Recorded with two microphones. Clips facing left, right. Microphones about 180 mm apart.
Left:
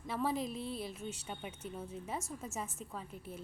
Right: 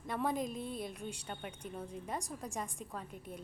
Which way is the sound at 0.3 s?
45° right (ahead or behind).